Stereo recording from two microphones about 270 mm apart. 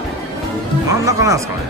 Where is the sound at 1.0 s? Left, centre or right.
Centre.